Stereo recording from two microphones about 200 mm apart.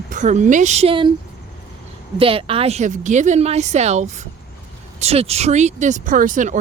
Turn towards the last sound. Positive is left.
turn(degrees=-40)  # may be behind; listen again after turning